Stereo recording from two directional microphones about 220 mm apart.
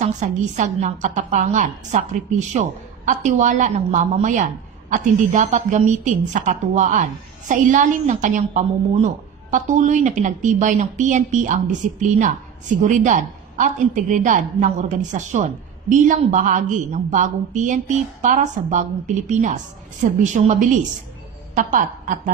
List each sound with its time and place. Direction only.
0.0 s a woman's voice: 30° right (ahead or behind)